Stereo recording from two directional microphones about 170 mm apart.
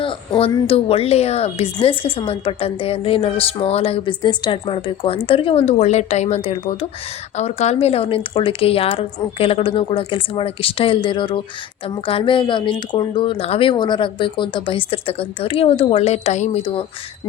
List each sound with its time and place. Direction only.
0.0 s speech: 30° left (ahead or behind)